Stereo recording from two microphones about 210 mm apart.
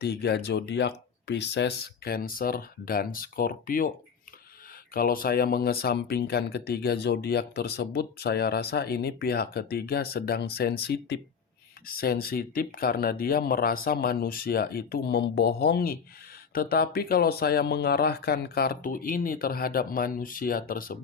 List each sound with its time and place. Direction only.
0.0 s speech: 50° left (ahead or behind)
4.9 s speech: 45° left (ahead or behind)